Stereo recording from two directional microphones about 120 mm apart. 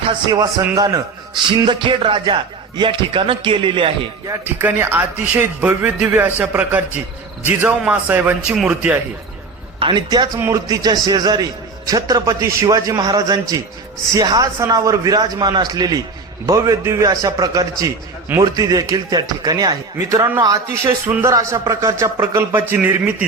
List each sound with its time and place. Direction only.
0.3 s a man's voice: 30° right (ahead or behind)
1.6 s a man's voice: 40° right (ahead or behind)
4.3 s a man's voice: 20° right (ahead or behind)
9.8 s a man's voice: 40° right (ahead or behind)
21.1 s a man's voice: 20° right (ahead or behind)
21.3 s a man's voice: 30° right (ahead or behind)